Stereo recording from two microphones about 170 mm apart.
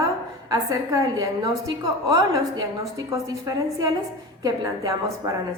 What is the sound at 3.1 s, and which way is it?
A woman's voice, 20° right (ahead or behind).